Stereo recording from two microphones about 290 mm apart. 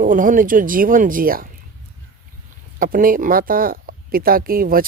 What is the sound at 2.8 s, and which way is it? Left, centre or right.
Speech, right.